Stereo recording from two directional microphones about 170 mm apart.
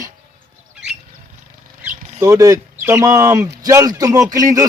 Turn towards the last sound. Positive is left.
turn(degrees=-20)  # may be behind; listen again after turning